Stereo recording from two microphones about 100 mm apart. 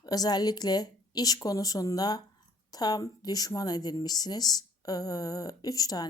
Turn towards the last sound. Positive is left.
turn(degrees=40)  # may be behind; listen again after turning